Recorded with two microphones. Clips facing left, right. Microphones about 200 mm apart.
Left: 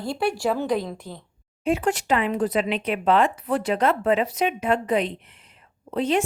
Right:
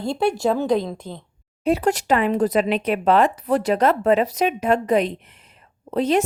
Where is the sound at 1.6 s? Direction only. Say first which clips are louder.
Right 3 dB; 35° right (ahead or behind).